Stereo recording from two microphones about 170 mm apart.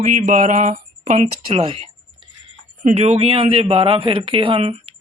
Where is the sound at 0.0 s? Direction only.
45° right (ahead or behind).